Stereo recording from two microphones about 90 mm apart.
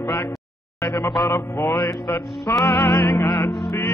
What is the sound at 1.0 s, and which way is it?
Mantra, 55° left (ahead or behind).